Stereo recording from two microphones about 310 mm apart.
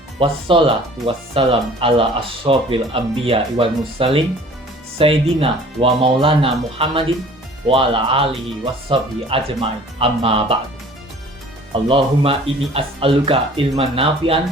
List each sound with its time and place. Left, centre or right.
0.2 s speech: centre
11.7 s speech: centre